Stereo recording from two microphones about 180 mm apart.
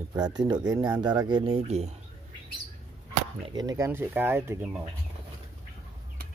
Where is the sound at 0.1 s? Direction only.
20° right (ahead or behind).